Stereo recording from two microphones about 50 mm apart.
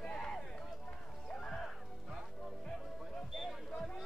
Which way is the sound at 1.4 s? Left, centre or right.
Centre.